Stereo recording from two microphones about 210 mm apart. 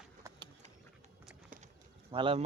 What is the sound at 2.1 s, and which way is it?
Speech, 25° right (ahead or behind).